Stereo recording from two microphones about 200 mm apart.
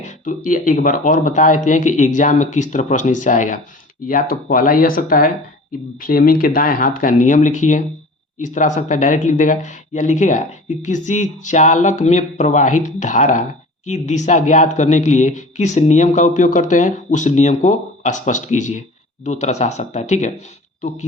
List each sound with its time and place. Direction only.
0.0 s speech: 40° left (ahead or behind)